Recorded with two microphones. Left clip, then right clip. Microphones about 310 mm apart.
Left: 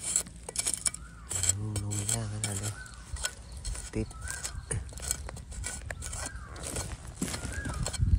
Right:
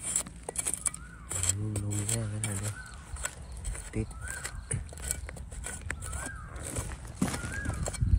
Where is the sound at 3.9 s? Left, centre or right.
Centre.